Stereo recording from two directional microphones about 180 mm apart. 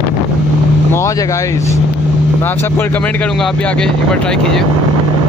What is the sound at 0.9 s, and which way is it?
Speech, 15° left (ahead or behind).